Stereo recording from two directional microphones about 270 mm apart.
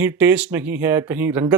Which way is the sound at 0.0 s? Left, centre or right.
Centre.